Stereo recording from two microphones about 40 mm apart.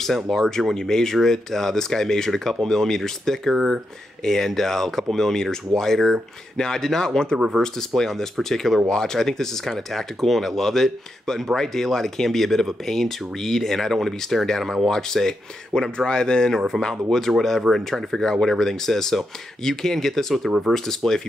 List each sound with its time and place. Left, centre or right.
0.0 s speech: centre
3.5 s speech: centre
4.2 s speech: centre